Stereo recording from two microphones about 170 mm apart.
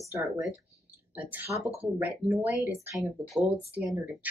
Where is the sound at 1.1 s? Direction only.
10° right (ahead or behind).